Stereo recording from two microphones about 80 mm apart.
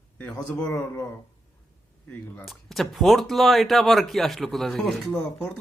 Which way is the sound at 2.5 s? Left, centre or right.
Centre.